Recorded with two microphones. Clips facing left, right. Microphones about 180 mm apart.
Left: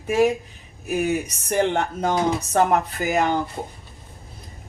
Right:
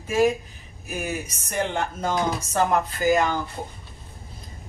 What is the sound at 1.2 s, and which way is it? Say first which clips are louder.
Speech: left 6 dB; 65° left (ahead or behind).